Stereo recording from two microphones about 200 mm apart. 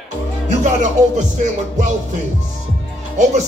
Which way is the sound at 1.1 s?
40° right (ahead or behind).